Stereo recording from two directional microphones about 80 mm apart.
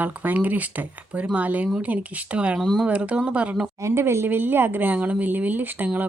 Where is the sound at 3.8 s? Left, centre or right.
Right.